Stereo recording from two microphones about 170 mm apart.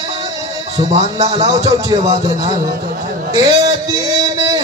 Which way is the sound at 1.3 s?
20° right (ahead or behind).